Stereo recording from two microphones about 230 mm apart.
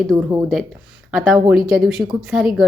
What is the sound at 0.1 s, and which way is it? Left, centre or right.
A woman's voice, centre.